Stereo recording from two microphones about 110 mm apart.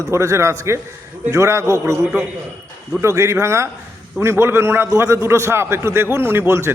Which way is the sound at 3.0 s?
25° right (ahead or behind).